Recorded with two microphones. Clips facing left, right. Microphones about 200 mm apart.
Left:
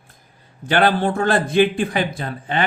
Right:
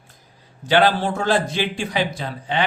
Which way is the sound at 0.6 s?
55° left (ahead or behind).